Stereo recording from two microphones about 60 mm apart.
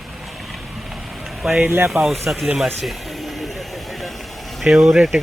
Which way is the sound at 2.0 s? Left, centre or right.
Right.